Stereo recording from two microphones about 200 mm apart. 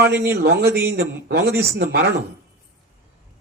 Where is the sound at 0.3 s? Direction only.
55° right (ahead or behind).